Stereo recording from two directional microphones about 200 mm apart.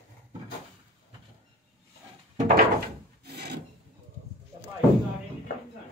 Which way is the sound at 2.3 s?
40° right (ahead or behind).